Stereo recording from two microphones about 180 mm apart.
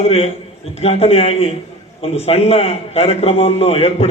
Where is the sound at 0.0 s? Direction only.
35° left (ahead or behind).